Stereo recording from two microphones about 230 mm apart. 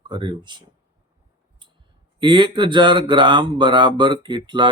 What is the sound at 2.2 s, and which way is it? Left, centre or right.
Speech, centre.